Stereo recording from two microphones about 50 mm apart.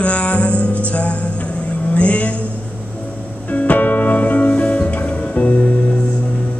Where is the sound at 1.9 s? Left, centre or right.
Left.